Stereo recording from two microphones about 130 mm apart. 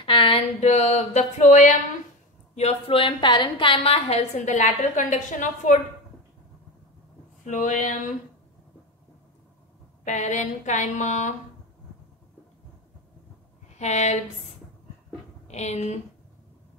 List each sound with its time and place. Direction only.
0.0 s a sound: 40° left (ahead or behind)
0.6 s a sound: 60° left (ahead or behind)
2.5 s a woman's voice: 55° left (ahead or behind)
7.4 s speech: 75° left (ahead or behind)
10.0 s speech: 65° left (ahead or behind)
13.7 s a woman's voice: 60° left (ahead or behind)
15.4 s a woman's voice: 60° left (ahead or behind)